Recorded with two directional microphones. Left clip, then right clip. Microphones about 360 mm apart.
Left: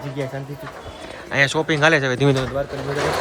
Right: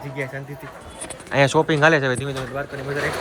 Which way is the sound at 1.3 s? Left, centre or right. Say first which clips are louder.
Right 1 dB; centre.